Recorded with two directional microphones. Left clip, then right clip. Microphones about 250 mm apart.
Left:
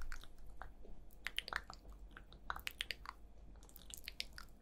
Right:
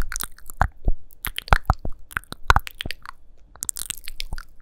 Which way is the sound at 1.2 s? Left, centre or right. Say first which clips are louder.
Right 12 dB; right.